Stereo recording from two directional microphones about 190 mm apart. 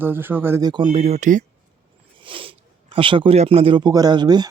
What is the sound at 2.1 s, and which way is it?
Speech, 25° right (ahead or behind).